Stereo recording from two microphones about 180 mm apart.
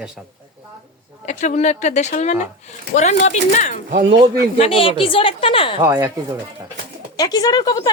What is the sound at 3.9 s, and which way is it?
Speech, 40° right (ahead or behind).